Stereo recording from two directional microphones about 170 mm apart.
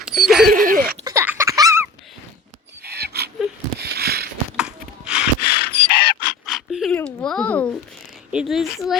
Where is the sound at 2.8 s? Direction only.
70° right (ahead or behind).